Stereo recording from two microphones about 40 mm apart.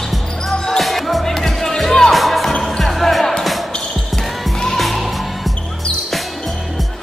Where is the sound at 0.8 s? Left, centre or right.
Centre.